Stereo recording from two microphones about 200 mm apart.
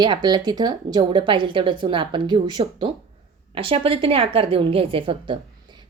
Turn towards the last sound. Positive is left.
turn(degrees=-25)  # may be behind; listen again after turning